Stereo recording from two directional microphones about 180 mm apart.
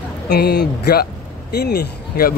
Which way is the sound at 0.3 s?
65° left (ahead or behind).